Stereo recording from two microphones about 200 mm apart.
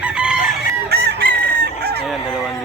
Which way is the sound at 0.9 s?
55° right (ahead or behind).